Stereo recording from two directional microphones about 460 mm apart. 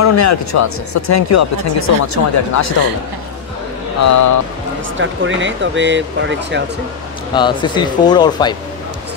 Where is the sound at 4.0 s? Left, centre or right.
Left.